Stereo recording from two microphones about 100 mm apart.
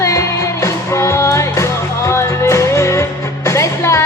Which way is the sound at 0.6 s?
25° left (ahead or behind).